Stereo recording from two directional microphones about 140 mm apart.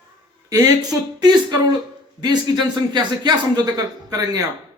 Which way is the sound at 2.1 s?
30° right (ahead or behind).